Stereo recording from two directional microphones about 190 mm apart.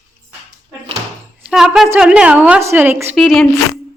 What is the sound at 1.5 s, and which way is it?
A woman's voice, centre (ahead or behind).